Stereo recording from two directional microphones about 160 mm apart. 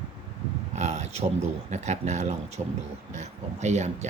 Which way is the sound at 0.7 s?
45° right (ahead or behind).